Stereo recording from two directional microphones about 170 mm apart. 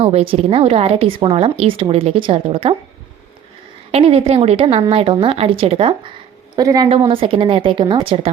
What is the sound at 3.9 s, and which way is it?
Speech, 35° right (ahead or behind).